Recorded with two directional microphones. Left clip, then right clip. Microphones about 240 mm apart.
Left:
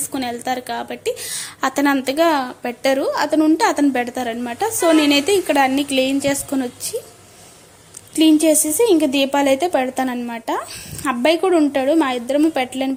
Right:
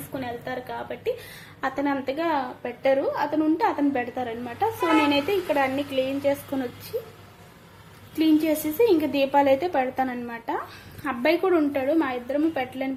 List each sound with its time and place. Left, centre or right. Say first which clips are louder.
0.1 s a woman's voice: left 8 dB; left
8.2 s a woman's voice: left 8 dB; left